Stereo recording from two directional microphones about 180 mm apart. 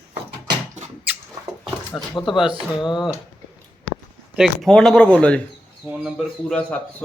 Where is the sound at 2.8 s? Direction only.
25° left (ahead or behind).